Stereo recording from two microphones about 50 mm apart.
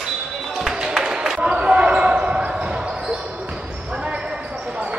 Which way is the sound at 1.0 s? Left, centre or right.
Centre.